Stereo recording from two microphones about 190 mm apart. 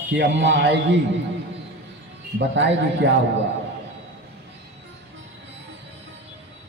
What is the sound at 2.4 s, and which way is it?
Speech, 70° right (ahead or behind).